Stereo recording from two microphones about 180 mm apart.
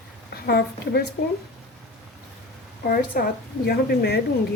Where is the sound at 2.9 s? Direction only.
55° left (ahead or behind).